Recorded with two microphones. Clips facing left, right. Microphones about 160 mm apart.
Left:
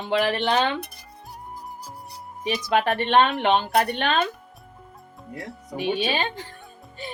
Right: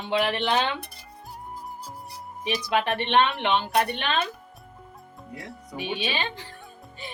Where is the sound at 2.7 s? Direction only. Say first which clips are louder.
Left 3 dB; 45° left (ahead or behind).